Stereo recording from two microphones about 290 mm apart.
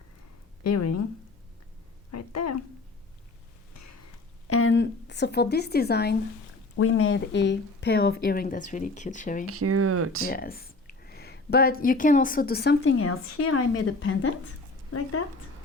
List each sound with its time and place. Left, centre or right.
0.6 s a woman's voice: left
2.1 s a sound: left
4.4 s a sound: left
6.7 s speech: left
9.5 s speech: right
10.2 s speech: left
12.8 s a woman's voice: left